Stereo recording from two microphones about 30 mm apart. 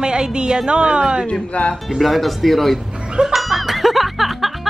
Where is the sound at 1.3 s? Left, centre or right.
Left.